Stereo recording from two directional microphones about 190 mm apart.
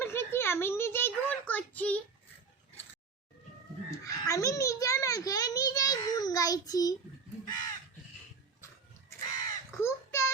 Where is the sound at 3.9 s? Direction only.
15° left (ahead or behind).